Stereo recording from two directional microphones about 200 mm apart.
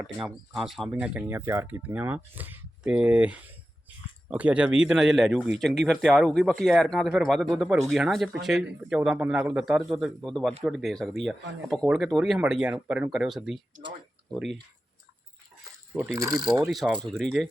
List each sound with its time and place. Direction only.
0.0 s speech: 5° right (ahead or behind)
16.0 s mechanisms: 15° right (ahead or behind)
16.6 s speech: centre (ahead or behind)